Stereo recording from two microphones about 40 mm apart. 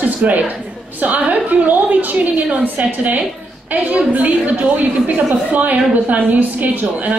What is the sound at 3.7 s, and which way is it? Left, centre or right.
A woman's voice, right.